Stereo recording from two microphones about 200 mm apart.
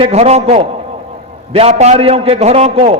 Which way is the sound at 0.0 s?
30° right (ahead or behind).